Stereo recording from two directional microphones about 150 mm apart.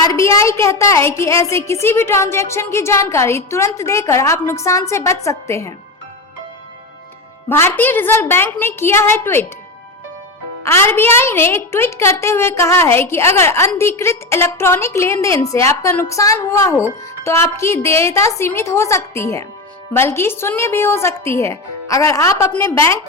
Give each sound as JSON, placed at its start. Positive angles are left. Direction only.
{"t": 0.0, "sound": "a woman's voice", "side_deg": 25}
{"t": 7.4, "sound": "a woman's voice", "side_deg": 15}
{"t": 10.6, "sound": "a woman's voice", "side_deg": 15}